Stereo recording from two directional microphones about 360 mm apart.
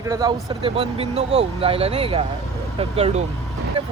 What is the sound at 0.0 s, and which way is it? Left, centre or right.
Speech, centre.